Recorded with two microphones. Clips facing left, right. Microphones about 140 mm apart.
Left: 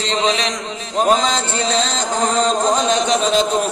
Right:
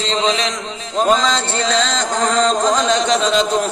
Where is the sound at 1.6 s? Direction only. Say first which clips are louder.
Right 2 dB; 90° right.